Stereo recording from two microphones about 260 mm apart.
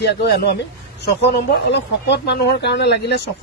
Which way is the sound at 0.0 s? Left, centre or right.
Left.